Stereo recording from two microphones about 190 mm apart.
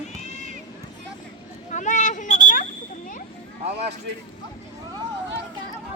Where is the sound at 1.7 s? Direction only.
40° left (ahead or behind).